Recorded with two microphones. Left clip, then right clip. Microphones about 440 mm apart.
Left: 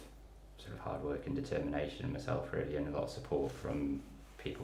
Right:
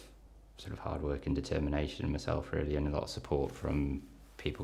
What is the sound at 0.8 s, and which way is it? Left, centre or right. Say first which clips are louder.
Speech: right 2 dB; right.